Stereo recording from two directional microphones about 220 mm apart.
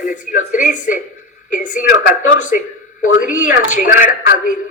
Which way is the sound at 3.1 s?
35° left (ahead or behind).